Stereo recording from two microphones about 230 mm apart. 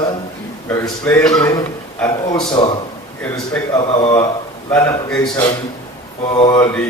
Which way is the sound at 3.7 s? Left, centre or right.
Centre.